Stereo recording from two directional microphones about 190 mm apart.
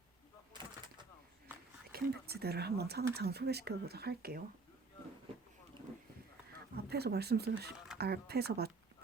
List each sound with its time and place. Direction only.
1.9 s speech: 55° right (ahead or behind)
6.7 s speech: 55° right (ahead or behind)